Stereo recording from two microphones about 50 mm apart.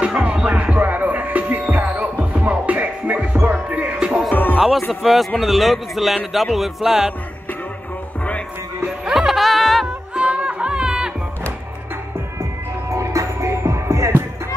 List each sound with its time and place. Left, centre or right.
0.0 s music: right
4.3 s music: left
4.6 s music: centre
5.0 s a man's voice: centre
9.0 s music: centre
10.1 s music: right
12.9 s music: right